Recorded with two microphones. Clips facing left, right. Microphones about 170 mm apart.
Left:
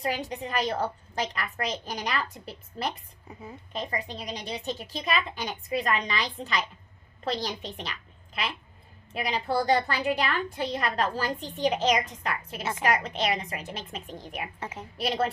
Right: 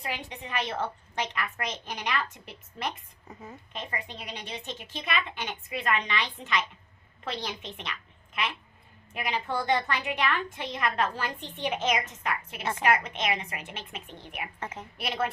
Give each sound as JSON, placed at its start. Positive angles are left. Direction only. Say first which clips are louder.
{"t": 0.0, "sound": "a woman's voice", "louder": "left 6 dB", "side_deg": 40}
{"t": 3.3, "sound": "a woman's voice", "louder": "left 1 dB", "side_deg": 10}
{"t": 3.7, "sound": "a woman's voice", "louder": "left 5 dB", "side_deg": 35}
{"t": 14.6, "sound": "a woman's voice", "louder": "left 1 dB", "side_deg": 10}
{"t": 14.9, "sound": "a woman's voice", "louder": "left 4 dB", "side_deg": 35}